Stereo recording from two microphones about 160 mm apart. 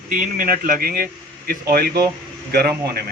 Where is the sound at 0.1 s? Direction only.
60° right (ahead or behind).